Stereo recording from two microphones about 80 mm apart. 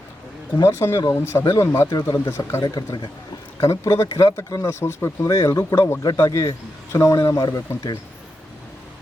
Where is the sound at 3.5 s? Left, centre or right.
Left.